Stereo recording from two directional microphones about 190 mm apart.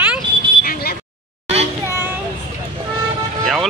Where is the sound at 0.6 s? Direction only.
50° left (ahead or behind).